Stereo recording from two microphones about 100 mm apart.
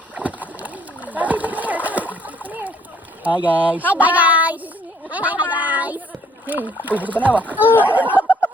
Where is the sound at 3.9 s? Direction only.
15° right (ahead or behind).